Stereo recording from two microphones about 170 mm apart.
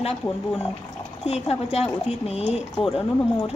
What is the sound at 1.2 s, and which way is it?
Speech, 35° left (ahead or behind).